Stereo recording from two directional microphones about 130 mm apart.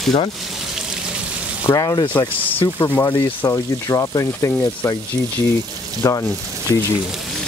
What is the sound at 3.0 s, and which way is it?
Speech, 30° left (ahead or behind).